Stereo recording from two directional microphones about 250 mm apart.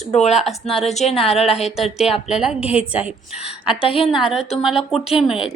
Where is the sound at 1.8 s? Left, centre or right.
Centre.